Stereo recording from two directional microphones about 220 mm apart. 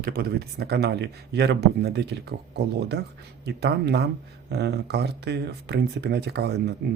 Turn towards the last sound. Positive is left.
turn(degrees=-50)  # may be behind; listen again after turning